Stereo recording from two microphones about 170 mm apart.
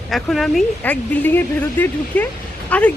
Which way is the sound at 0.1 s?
Centre (ahead or behind).